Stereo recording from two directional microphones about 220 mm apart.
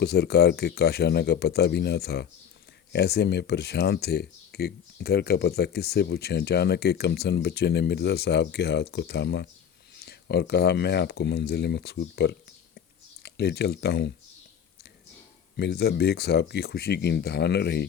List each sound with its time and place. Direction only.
0.0 s speech: 45° left (ahead or behind)
15.5 s speech: 45° left (ahead or behind)